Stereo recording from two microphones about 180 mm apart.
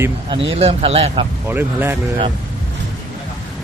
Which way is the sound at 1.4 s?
10° right (ahead or behind).